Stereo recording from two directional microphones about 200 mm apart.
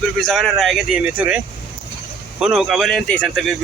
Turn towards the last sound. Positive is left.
turn(degrees=0)  # may be behind; listen again after turning